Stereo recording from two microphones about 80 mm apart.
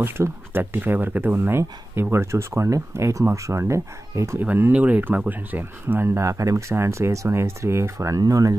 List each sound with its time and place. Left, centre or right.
0.0 s speech: right
4.4 s speech: right